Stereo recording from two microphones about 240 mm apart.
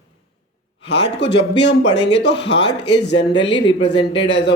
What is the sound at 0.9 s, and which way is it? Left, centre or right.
Speech, left.